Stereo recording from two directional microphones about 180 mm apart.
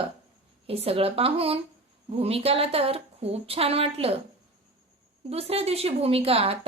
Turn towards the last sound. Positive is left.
turn(degrees=-35)  # may be behind; listen again after turning